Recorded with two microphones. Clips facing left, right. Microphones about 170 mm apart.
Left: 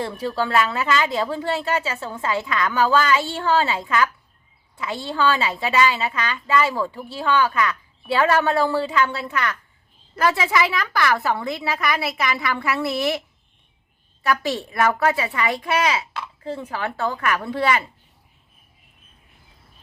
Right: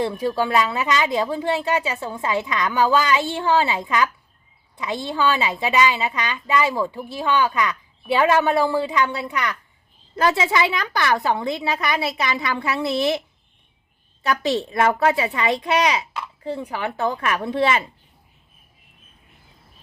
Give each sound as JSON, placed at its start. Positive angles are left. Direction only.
{"t": 0.0, "sound": "a woman's voice", "side_deg": -15}
{"t": 14.3, "sound": "a woman's voice", "side_deg": -20}